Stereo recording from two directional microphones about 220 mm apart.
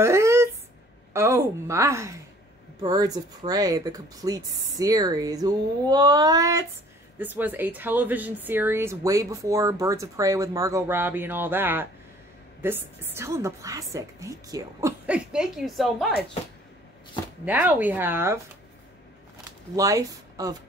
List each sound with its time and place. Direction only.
0.0 s a sound: 10° right (ahead or behind)
1.1 s speech: 10° right (ahead or behind)
17.5 s speech: 10° right (ahead or behind)
19.7 s speech: 15° right (ahead or behind)